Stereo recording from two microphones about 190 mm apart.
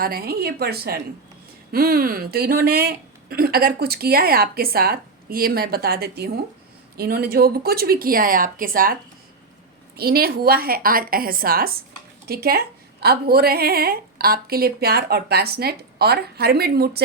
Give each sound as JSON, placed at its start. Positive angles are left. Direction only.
{"t": 0.0, "sound": "speech", "side_deg": -50}
{"t": 10.0, "sound": "a woman's voice", "side_deg": -55}